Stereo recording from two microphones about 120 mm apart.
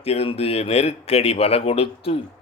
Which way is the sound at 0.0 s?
55° left (ahead or behind).